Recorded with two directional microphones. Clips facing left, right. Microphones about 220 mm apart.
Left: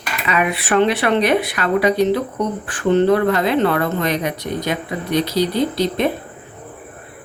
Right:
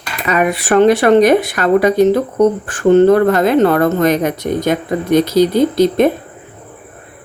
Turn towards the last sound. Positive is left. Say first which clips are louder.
# right 7 dB
turn(degrees=-45)  # may be behind; listen again after turning